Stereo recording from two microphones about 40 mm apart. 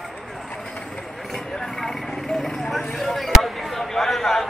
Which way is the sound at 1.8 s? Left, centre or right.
Centre.